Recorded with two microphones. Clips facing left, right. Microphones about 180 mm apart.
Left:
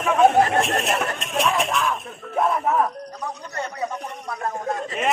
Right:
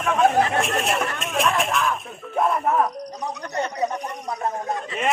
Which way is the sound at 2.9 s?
15° right (ahead or behind).